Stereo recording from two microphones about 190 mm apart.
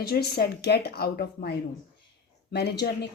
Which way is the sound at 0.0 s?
55° left (ahead or behind).